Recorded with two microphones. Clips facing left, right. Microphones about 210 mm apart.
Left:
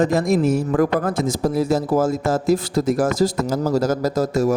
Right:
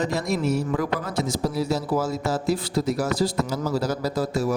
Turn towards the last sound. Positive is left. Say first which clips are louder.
# left 5 dB
turn(degrees=45)  # may be behind; listen again after turning